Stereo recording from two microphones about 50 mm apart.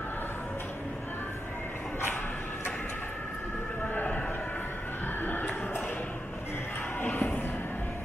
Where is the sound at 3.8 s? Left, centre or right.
Left.